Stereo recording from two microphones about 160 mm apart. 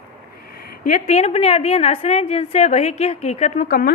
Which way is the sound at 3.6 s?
65° left (ahead or behind).